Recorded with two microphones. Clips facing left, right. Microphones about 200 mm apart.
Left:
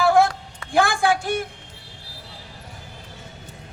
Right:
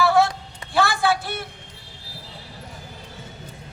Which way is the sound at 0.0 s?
50° left (ahead or behind).